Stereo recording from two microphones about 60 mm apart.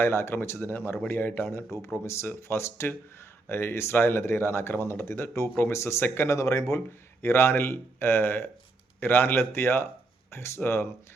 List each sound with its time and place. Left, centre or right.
0.0 s speech: left
6.3 s speech: left
6.7 s speech: left